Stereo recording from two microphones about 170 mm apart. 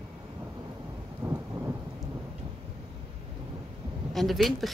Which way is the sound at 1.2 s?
20° right (ahead or behind).